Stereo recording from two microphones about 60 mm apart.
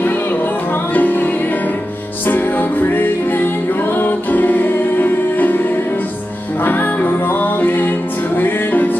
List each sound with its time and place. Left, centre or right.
0.0 s music: left